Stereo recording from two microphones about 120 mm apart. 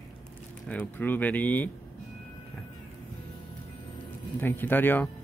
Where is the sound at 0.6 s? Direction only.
10° left (ahead or behind).